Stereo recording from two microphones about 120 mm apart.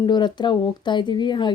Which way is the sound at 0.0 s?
40° left (ahead or behind).